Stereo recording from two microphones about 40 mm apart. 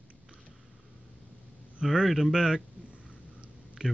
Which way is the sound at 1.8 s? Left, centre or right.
Centre.